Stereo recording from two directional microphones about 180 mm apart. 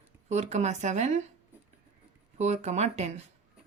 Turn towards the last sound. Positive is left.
turn(degrees=-40)  # may be behind; listen again after turning